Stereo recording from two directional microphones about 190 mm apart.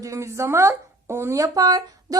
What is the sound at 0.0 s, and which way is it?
A woman's voice, 15° right (ahead or behind).